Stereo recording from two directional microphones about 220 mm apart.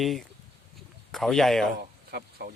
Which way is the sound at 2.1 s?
45° right (ahead or behind).